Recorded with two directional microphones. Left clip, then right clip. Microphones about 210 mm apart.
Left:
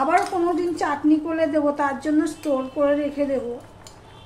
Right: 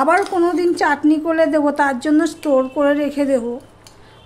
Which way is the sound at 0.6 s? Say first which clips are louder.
Right 7 dB; 55° right (ahead or behind).